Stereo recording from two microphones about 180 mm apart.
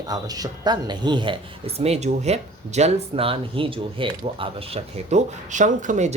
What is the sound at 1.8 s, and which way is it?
Speech, 35° right (ahead or behind).